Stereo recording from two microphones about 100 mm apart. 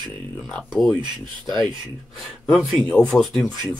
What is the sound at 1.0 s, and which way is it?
Speech, 50° right (ahead or behind).